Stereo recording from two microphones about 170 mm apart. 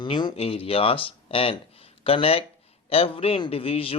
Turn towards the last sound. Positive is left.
turn(degrees=35)  # may be behind; listen again after turning